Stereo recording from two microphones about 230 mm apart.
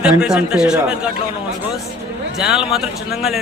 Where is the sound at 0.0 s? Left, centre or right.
Centre.